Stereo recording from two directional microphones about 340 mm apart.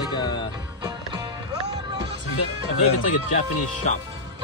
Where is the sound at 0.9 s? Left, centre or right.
Centre.